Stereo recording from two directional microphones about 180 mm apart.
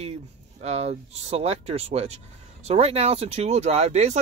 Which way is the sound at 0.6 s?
40° right (ahead or behind).